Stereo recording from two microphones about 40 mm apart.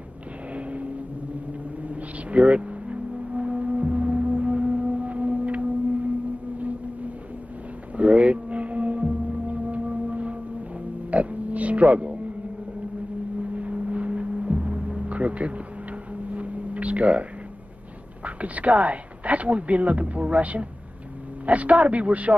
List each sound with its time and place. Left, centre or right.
0.5 s vehicle: right
1.8 s music: right
7.9 s a sound: right
13.4 s foghorn: right
14.8 s music: right
15.0 s vehicle: right
18.2 s speech: right